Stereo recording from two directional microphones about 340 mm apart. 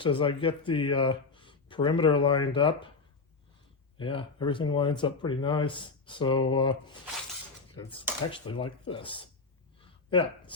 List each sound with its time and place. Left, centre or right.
0.0 s speech: centre
3.9 s speech: centre
7.8 s speech: centre